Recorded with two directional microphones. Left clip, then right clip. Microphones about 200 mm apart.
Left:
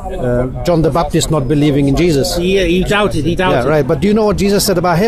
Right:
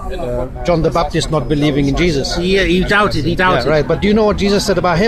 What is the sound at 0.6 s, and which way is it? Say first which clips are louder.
Speech: even; 50° left (ahead or behind).